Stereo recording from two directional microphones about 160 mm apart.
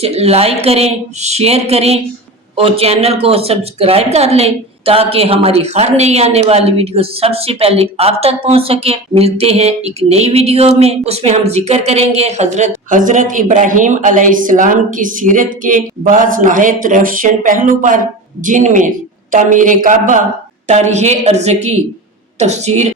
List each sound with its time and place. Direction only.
0.0 s speech: 40° right (ahead or behind)